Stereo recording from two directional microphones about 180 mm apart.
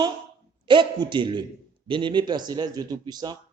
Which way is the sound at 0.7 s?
25° right (ahead or behind).